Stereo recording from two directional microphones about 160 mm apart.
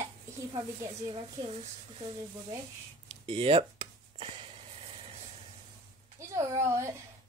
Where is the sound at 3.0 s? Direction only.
35° right (ahead or behind).